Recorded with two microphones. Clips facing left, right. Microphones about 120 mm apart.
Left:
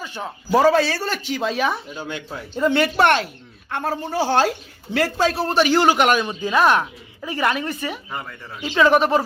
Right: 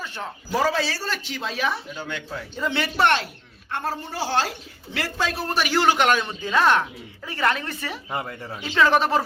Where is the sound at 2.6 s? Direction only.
50° left (ahead or behind); by 5.8 s 25° left (ahead or behind).